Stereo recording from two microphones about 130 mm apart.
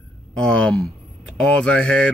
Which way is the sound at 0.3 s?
5° left (ahead or behind).